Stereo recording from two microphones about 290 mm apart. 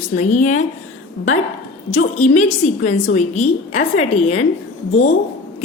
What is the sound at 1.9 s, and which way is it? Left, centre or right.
A woman's voice, left.